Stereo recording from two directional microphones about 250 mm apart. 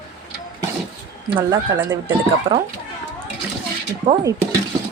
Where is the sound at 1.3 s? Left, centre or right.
Centre.